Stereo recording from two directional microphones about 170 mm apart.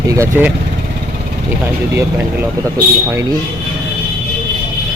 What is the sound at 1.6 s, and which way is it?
Speech, 15° right (ahead or behind).